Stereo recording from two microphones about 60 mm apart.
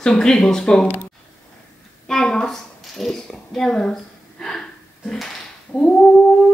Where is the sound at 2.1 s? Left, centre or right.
Centre.